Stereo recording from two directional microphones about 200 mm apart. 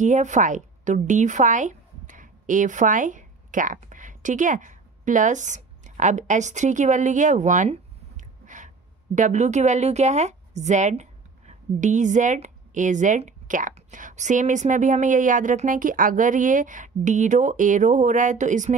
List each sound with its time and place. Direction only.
0.0 s a woman's voice: 35° right (ahead or behind)